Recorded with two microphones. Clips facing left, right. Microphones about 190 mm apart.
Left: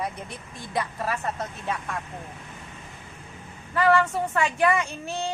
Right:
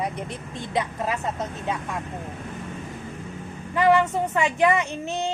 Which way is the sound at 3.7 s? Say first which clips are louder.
Right 2 dB; 20° right (ahead or behind).